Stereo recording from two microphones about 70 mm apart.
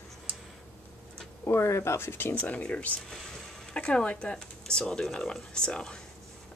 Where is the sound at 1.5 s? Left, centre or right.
Left.